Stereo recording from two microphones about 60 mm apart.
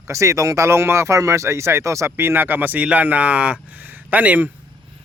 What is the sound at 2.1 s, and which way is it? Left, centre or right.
Speech, right.